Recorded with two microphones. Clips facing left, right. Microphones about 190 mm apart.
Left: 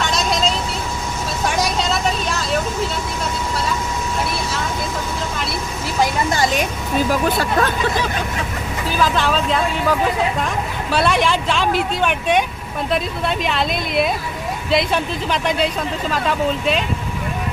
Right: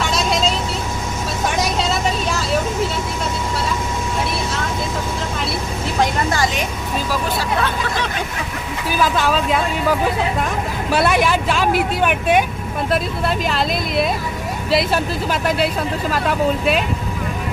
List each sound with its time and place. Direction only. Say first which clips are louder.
0.0 s vehicle: right 1 dB; 5° right (ahead or behind)
1.5 s vehicle: even; centre (ahead or behind)
7.1 s vehicle: left 1 dB; 50° left (ahead or behind)
9.0 s vehicle: right 1 dB; 5° right (ahead or behind)
10.9 s speech: right 1 dB; 10° right (ahead or behind)